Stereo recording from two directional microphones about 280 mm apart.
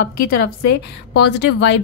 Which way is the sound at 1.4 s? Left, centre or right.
Left.